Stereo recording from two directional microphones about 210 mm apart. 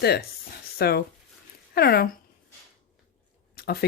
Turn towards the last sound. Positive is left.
turn(degrees=50)  # may be behind; listen again after turning